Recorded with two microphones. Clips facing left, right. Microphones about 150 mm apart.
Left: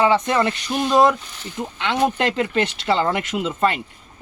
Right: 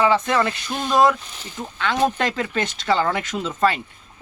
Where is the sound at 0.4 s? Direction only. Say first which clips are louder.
Left 4 dB; 15° left (ahead or behind).